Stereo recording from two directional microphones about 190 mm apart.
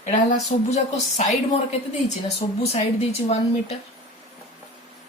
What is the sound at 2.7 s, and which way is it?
A woman's voice, 35° left (ahead or behind).